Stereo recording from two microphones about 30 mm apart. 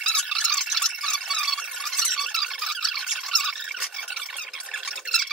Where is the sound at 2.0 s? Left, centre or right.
Centre.